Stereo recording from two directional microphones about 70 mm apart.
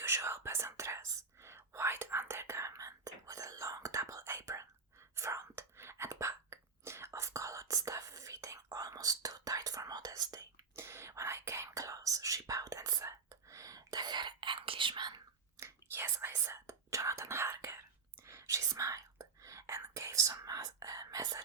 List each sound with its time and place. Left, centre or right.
0.0 s whispering: right
10.8 s whispering: right
13.9 s whispering: right
15.6 s whispering: right